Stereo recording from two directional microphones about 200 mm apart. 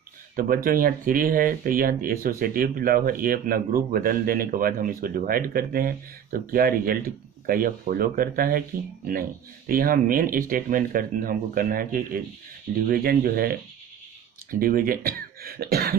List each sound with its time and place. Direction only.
0.4 s speech: 45° right (ahead or behind)